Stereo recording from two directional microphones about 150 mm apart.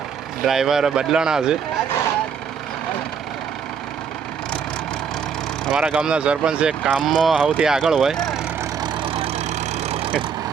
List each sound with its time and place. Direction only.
0.4 s speech: centre (ahead or behind)
5.7 s speech: 10° right (ahead or behind)
8.8 s vehicle: 40° right (ahead or behind)